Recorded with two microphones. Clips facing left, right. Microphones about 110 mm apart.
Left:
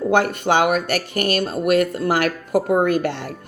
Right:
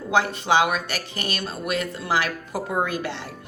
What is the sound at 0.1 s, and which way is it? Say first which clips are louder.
Speech: left 2 dB; 55° left (ahead or behind).